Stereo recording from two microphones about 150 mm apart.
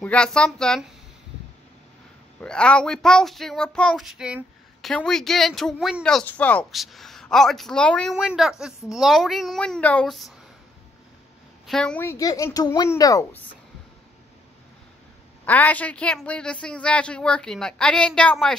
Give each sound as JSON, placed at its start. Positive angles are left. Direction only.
{"t": 0.0, "sound": "speech", "side_deg": 5}
{"t": 2.4, "sound": "speech", "side_deg": 5}
{"t": 6.7, "sound": "speech", "side_deg": 0}
{"t": 11.6, "sound": "speech", "side_deg": 5}
{"t": 15.4, "sound": "a woman's voice", "side_deg": 10}